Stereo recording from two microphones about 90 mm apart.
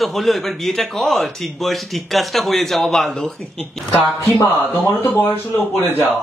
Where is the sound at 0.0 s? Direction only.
Centre (ahead or behind).